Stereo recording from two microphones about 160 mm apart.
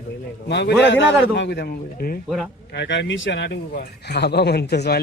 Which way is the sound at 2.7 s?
90° left.